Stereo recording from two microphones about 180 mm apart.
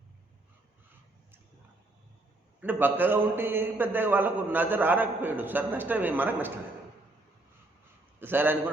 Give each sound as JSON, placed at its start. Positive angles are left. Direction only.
{"t": 2.6, "sound": "a man's voice", "side_deg": -10}
{"t": 8.2, "sound": "a man's voice", "side_deg": -10}